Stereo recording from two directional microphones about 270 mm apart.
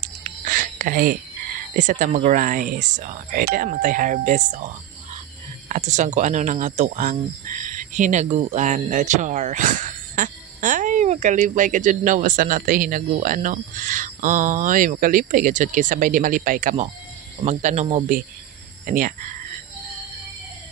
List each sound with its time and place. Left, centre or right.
0.0 s whispering: right
1.8 s speech: right